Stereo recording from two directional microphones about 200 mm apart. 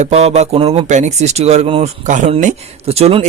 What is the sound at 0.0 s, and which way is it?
Speech, 30° right (ahead or behind).